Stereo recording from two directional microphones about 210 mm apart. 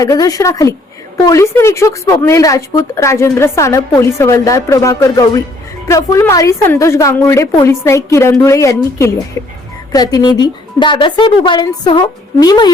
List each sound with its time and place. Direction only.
0.0 s a woman's voice: 15° left (ahead or behind)